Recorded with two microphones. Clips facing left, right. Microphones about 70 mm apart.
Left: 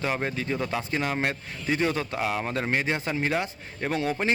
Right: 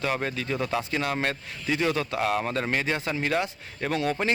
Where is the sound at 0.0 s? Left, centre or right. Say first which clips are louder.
Even; centre.